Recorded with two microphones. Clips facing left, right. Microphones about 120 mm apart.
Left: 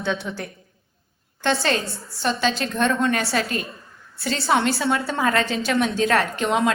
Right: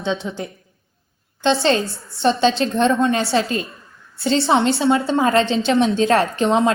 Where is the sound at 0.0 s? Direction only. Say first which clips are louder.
Right 3 dB; 20° right (ahead or behind).